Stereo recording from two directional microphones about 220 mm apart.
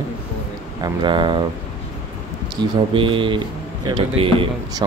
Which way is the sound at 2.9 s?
25° right (ahead or behind).